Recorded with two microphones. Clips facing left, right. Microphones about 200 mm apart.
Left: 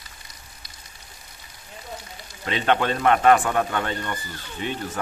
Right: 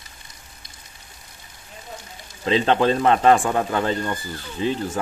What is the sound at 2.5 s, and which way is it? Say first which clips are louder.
Speech: right 4 dB; 30° right (ahead or behind).